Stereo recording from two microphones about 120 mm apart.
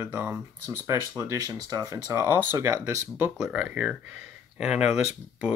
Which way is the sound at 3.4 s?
10° right (ahead or behind).